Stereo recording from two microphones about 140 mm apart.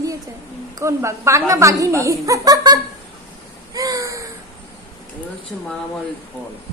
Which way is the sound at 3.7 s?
25° right (ahead or behind).